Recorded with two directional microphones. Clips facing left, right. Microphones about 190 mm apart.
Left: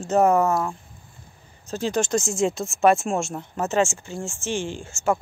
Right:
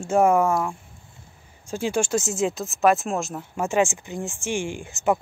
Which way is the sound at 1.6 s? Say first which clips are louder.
Even; 10° right (ahead or behind).